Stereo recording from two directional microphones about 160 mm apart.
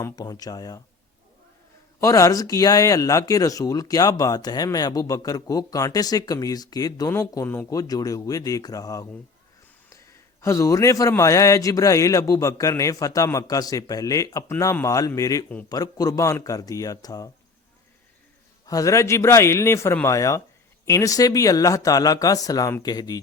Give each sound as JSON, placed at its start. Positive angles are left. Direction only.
{"t": 0.0, "sound": "speech", "side_deg": 25}
{"t": 2.0, "sound": "speech", "side_deg": 20}
{"t": 10.4, "sound": "speech", "side_deg": 20}
{"t": 18.6, "sound": "a man's voice", "side_deg": 20}